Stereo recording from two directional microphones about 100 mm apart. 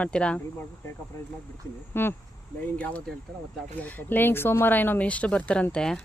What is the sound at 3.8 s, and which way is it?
Speech, 15° left (ahead or behind).